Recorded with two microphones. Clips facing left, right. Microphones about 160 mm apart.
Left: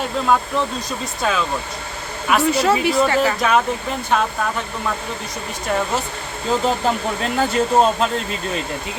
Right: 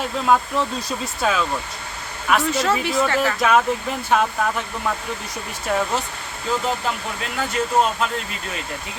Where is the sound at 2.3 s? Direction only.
10° left (ahead or behind).